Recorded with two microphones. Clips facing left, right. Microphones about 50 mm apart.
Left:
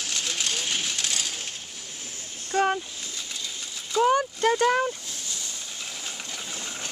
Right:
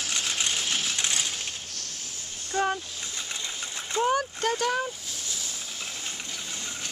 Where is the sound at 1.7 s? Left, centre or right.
Centre.